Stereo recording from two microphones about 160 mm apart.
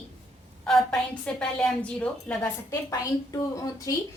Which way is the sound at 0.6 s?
5° left (ahead or behind).